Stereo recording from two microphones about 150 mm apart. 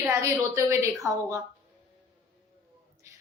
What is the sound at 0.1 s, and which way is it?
Speech, 20° right (ahead or behind).